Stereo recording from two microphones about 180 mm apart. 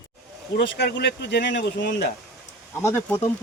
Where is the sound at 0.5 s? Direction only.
70° left (ahead or behind).